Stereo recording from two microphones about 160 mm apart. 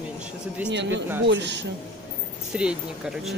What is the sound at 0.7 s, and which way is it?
Speech, 90° right.